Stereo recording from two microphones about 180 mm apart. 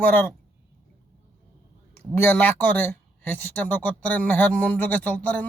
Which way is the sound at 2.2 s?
10° left (ahead or behind).